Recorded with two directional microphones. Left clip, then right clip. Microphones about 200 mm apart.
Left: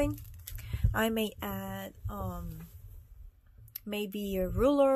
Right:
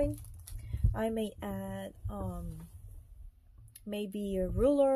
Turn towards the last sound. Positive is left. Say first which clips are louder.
# left 1 dB
turn(degrees=15)  # may be behind; listen again after turning